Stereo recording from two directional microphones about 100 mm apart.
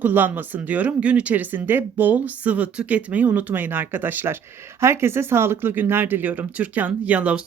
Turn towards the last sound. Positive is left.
turn(degrees=-15)  # may be behind; listen again after turning